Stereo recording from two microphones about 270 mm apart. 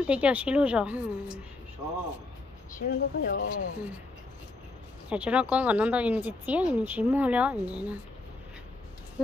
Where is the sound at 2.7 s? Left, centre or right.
Left.